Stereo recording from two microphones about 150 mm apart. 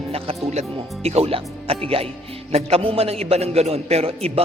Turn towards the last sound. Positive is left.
turn(degrees=-40)  # may be behind; listen again after turning